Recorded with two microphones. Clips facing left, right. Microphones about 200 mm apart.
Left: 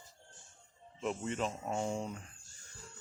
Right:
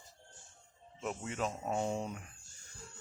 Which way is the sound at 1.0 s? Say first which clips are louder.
Left 2 dB; 5° right (ahead or behind).